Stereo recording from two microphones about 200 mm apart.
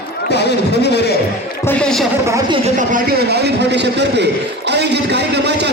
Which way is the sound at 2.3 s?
20° right (ahead or behind).